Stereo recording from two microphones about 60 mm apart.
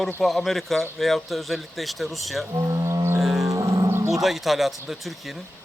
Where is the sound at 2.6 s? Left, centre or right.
Right.